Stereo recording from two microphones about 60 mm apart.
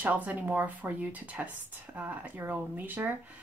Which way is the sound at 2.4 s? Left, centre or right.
Right.